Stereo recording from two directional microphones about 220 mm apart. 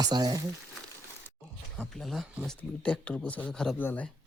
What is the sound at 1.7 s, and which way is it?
Speech, centre (ahead or behind).